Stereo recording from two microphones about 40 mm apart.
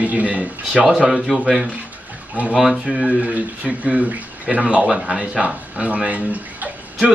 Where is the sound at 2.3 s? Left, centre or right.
Right.